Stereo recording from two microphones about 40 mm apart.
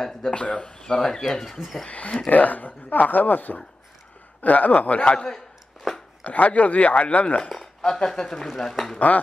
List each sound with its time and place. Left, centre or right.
0.3 s speech: left
1.9 s speech: left
2.3 s speech: left
5.9 s a sound: centre
6.2 s speech: left
7.4 s speech: centre